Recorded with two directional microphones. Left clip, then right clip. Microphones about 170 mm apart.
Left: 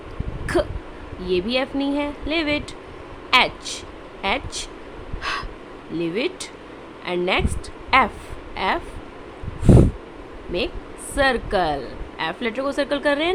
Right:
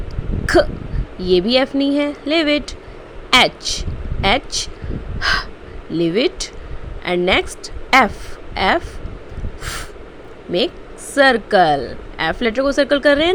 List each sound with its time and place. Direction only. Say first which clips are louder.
0.4 s hiccup: right 8 dB; 25° right (ahead or behind)
1.2 s a woman's voice: right 7 dB; 30° right (ahead or behind)
11.1 s a woman's voice: right 7 dB; 25° right (ahead or behind)